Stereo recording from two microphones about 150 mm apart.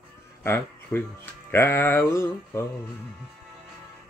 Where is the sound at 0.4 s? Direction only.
15° left (ahead or behind).